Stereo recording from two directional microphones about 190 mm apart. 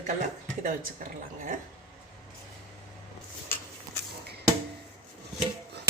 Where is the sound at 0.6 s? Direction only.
45° right (ahead or behind).